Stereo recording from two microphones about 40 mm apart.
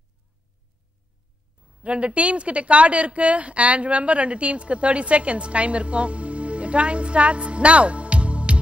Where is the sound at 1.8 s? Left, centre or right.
Right.